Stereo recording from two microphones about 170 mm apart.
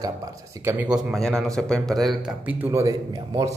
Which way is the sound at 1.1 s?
Centre (ahead or behind).